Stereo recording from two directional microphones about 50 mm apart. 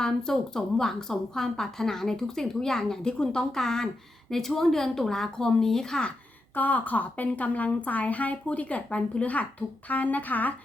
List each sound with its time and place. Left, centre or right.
0.0 s a woman's voice: centre
6.6 s a woman's voice: left